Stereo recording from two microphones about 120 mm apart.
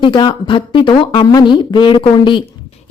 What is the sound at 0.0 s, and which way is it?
A woman's voice, 40° left (ahead or behind).